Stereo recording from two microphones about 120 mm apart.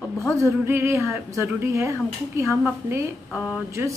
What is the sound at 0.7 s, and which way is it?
A woman's voice, 20° right (ahead or behind).